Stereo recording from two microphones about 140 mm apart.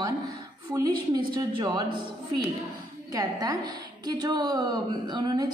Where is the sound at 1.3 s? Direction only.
30° right (ahead or behind).